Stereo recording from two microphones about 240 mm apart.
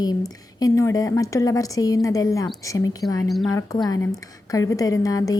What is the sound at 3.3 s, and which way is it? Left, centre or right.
Speech, centre.